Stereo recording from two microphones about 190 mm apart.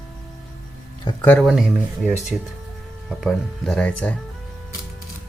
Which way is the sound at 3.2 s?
5° left (ahead or behind).